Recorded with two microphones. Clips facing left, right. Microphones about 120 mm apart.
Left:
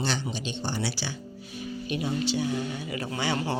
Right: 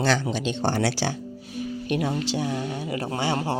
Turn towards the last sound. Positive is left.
turn(degrees=-50)  # may be behind; listen again after turning